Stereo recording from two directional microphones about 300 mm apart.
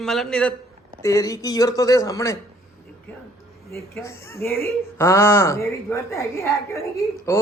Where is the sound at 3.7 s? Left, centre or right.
Centre.